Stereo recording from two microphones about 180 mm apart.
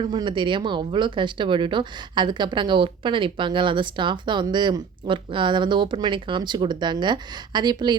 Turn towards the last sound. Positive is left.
turn(degrees=-25)  # may be behind; listen again after turning